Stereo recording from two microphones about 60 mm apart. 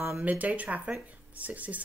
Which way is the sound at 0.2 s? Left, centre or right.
Right.